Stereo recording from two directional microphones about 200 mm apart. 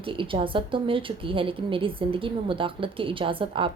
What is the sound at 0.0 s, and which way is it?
Speech, 25° right (ahead or behind).